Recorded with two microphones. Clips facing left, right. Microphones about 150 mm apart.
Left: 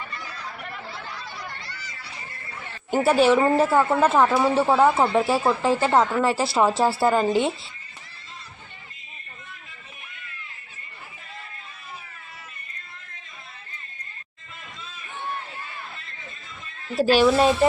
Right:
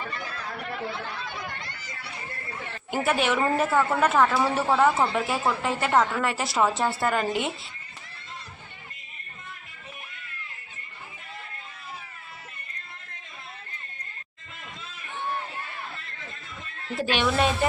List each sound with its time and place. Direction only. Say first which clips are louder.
1.1 s a sound: right 1 dB; 55° right (ahead or behind)
2.9 s speech: left 7 dB; 35° left (ahead or behind)
17.0 s speech: left 7 dB; 35° left (ahead or behind)